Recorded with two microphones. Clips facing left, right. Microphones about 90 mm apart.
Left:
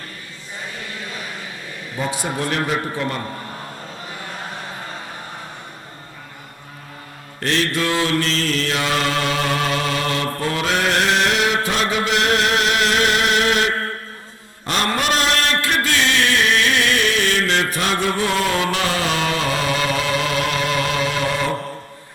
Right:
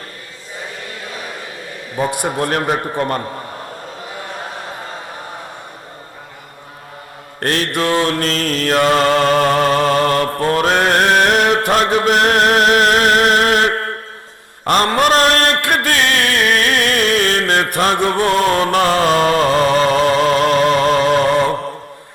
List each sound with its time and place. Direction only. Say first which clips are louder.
2.0 s a man's voice: right 6 dB; 60° right (ahead or behind)
2.4 s mantra: right 4 dB; 50° right (ahead or behind)
7.3 s mantra: right 2 dB; 50° right (ahead or behind)